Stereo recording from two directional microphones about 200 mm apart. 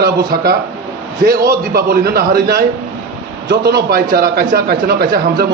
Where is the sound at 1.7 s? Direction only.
50° right (ahead or behind).